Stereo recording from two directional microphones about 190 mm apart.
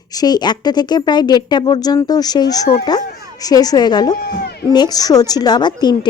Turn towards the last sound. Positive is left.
turn(degrees=20)  # may be behind; listen again after turning